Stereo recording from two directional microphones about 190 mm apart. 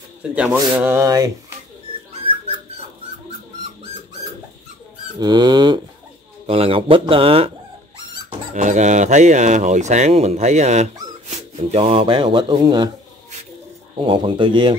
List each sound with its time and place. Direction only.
0.3 s speech: 10° right (ahead or behind)
5.2 s speech: 20° right (ahead or behind)
8.5 s speech: 40° right (ahead or behind)
13.9 s speech: 25° right (ahead or behind)